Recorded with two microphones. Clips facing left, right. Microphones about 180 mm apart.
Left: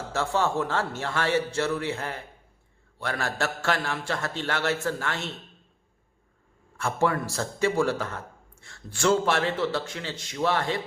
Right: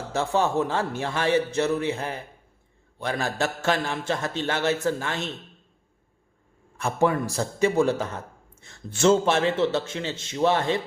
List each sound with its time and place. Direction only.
0.1 s a man's voice: 20° right (ahead or behind)
6.7 s a man's voice: 20° right (ahead or behind)